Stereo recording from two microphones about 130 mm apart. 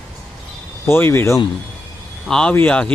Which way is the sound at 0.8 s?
20° left (ahead or behind).